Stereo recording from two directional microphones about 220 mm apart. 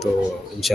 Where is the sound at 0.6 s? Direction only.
Centre (ahead or behind).